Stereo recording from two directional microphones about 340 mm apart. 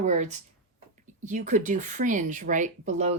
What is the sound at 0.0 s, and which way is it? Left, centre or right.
Speech, right.